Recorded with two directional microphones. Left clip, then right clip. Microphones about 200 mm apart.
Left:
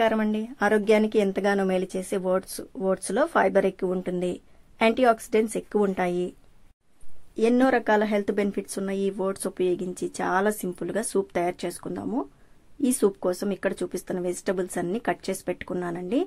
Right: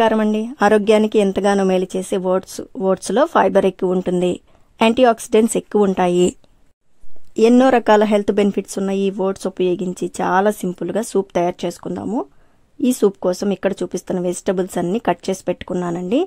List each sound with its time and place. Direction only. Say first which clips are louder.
0.0 s speech: right 8 dB; 40° right (ahead or behind)
7.3 s speech: right 9 dB; 45° right (ahead or behind)